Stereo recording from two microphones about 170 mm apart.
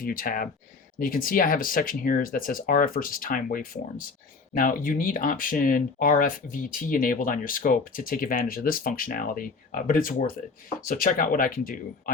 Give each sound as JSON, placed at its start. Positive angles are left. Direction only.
{"t": 0.0, "sound": "speech", "side_deg": 55}